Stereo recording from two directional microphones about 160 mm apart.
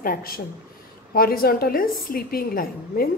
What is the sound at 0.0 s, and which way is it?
A woman's voice, 65° left (ahead or behind).